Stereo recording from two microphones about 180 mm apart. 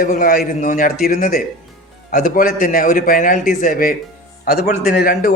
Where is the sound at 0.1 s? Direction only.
55° left (ahead or behind).